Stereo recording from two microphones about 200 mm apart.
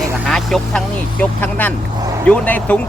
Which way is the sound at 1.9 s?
15° right (ahead or behind).